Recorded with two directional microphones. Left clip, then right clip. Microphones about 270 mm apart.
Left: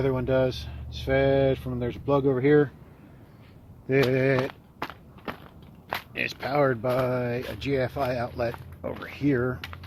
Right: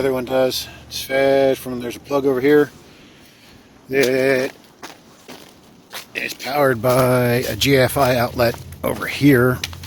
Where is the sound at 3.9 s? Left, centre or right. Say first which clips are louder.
Right 7 dB; centre.